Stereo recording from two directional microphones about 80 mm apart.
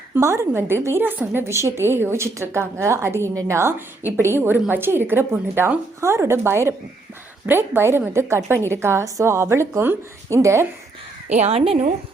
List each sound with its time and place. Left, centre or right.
0.2 s a woman's voice: right